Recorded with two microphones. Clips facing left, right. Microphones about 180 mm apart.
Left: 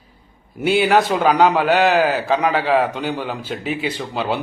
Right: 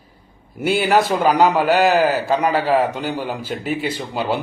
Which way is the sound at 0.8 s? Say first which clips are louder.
Right 1 dB; 5° right (ahead or behind).